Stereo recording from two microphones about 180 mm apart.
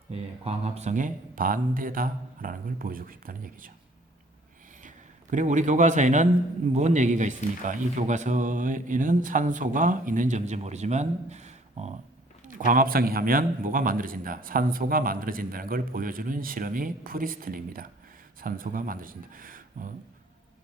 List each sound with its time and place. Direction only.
0.1 s a man's voice: 35° right (ahead or behind); by 3.7 s 50° right (ahead or behind)
4.8 s a man's voice: 45° right (ahead or behind)